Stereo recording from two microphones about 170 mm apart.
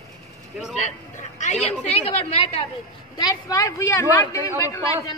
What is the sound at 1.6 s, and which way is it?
A woman's voice, 40° left (ahead or behind).